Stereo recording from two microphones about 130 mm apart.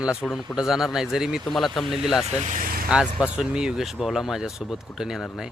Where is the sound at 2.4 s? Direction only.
80° right.